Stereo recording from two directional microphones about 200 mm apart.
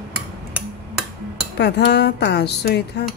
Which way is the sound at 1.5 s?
55° left (ahead or behind).